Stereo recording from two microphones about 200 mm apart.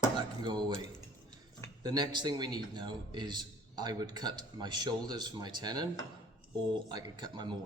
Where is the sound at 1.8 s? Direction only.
20° right (ahead or behind).